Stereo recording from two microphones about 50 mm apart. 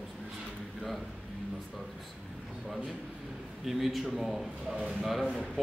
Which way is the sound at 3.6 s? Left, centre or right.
Centre.